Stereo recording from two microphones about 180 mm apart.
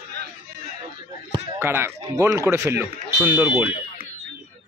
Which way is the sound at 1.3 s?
15° right (ahead or behind).